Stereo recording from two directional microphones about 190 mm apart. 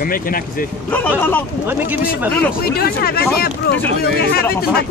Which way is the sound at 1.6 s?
10° right (ahead or behind).